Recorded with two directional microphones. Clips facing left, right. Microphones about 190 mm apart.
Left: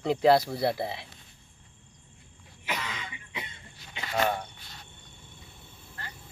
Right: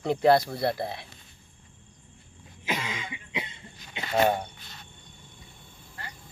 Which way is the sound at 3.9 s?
25° right (ahead or behind).